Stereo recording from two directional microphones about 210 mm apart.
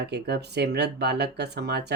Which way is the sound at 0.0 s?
50° right (ahead or behind).